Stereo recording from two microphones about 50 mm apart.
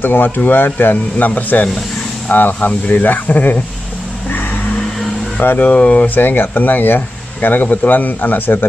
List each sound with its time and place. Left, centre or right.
0.0 s speech: left
5.4 s speech: left
5.7 s speech: left
6.0 s speech: left